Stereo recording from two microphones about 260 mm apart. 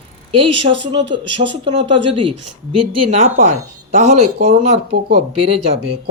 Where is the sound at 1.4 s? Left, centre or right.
Right.